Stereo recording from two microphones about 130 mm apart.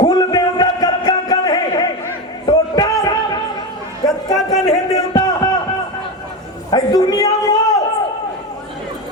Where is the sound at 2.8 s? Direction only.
30° left (ahead or behind).